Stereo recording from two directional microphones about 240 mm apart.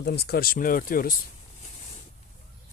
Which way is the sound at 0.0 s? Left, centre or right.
Left.